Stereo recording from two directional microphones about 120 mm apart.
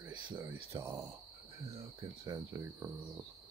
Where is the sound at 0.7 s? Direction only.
20° right (ahead or behind).